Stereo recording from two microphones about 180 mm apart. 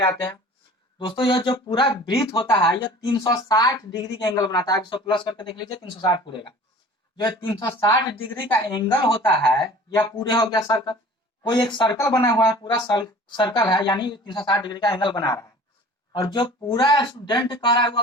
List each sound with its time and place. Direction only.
0.9 s speech: 25° left (ahead or behind)
8.6 s speech: 25° left (ahead or behind)